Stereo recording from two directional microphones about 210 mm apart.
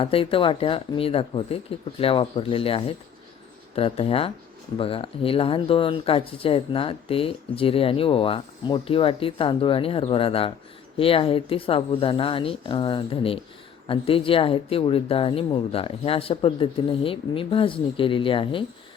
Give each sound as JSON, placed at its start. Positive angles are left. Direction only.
{"t": 0.0, "sound": "speech", "side_deg": 25}